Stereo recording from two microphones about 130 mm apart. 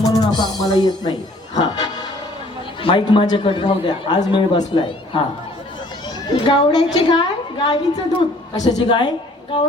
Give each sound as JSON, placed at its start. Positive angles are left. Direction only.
{"t": 0.0, "sound": "music", "side_deg": 30}
{"t": 2.8, "sound": "speech", "side_deg": 40}
{"t": 6.3, "sound": "speech", "side_deg": 40}